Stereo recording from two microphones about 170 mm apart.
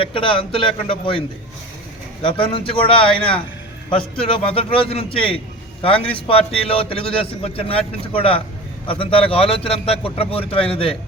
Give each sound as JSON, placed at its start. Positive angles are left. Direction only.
{"t": 0.0, "sound": "a man's voice", "side_deg": 30}
{"t": 2.2, "sound": "a man's voice", "side_deg": 30}